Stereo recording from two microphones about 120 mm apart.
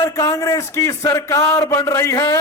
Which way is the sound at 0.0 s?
25° left (ahead or behind).